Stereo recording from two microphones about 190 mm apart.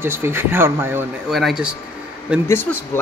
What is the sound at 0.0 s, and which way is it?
Speech, 10° right (ahead or behind).